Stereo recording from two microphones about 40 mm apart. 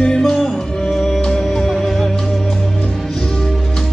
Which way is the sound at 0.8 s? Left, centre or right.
Centre.